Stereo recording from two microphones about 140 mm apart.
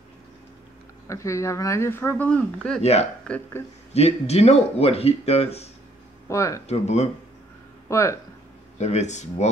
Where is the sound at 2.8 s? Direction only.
50° left (ahead or behind).